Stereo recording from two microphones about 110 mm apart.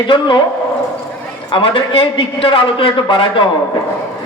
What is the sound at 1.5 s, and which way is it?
A man's voice, 50° left (ahead or behind).